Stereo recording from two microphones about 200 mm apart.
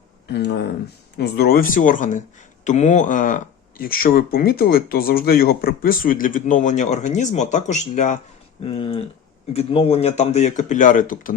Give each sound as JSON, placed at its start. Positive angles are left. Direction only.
{"t": 0.3, "sound": "speech", "side_deg": 55}